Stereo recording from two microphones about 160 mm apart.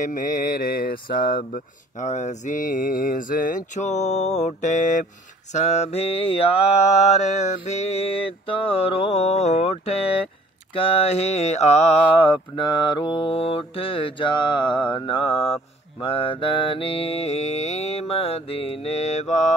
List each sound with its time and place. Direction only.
0.0 s speech: 55° left (ahead or behind)
5.5 s mantra: 45° left (ahead or behind)